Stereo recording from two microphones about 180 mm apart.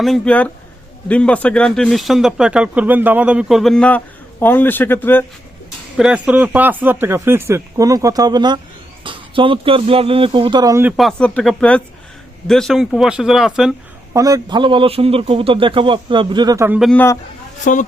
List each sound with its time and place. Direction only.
0.0 s speech: 5° left (ahead or behind)
6.0 s a man's voice: 5° right (ahead or behind)
10.9 s speech: 5° left (ahead or behind)
14.1 s a man's voice: 20° right (ahead or behind)
16.8 s speech: 10° left (ahead or behind)
17.6 s speech: 45° left (ahead or behind)